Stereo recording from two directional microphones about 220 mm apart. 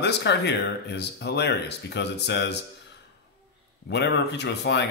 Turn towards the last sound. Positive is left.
turn(degrees=50)  # may be behind; listen again after turning